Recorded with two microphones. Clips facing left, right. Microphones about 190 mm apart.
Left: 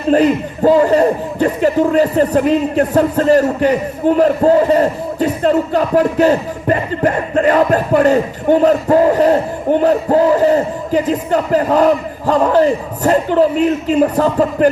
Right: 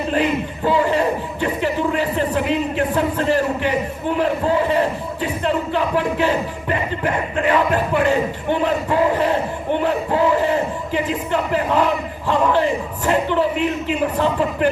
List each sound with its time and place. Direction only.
0.1 s speech: 40° left (ahead or behind)